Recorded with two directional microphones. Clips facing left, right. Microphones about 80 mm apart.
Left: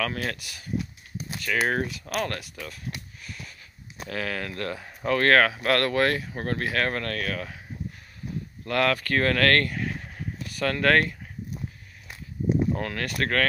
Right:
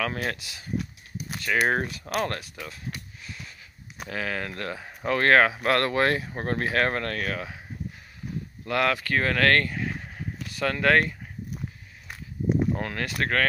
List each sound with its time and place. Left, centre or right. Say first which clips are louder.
0.0 s speech: even; right
3.3 s a sound: left 1 dB; right
4.1 s speech: even; centre
8.6 s speech: left 1 dB; centre
12.7 s speech: even; right